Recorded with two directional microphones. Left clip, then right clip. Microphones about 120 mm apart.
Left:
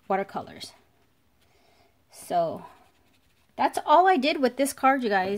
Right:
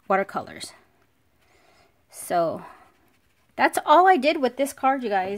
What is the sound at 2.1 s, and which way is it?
Speech, 40° right (ahead or behind).